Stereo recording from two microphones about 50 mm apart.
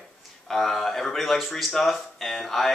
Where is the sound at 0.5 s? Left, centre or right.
Centre.